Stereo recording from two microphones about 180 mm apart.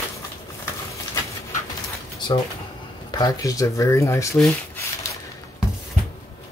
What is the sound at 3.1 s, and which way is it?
Speech, 20° left (ahead or behind).